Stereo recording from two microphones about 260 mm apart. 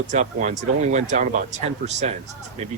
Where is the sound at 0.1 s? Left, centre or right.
Right.